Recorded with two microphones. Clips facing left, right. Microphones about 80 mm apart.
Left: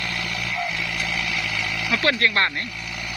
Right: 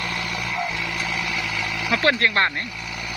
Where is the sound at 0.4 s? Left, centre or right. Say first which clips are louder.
Even; centre.